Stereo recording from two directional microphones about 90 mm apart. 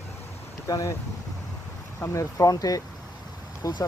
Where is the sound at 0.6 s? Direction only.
40° left (ahead or behind).